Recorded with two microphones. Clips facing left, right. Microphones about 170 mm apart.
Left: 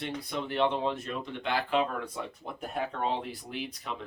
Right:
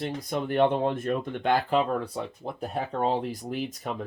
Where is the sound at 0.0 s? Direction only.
45° right (ahead or behind).